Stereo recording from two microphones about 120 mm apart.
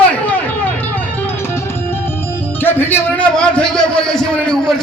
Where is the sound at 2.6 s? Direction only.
15° left (ahead or behind).